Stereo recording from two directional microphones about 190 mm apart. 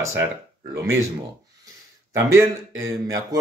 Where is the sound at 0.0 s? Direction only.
15° right (ahead or behind).